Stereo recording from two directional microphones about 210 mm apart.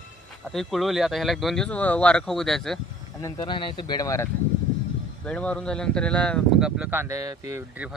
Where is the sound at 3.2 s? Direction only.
20° left (ahead or behind).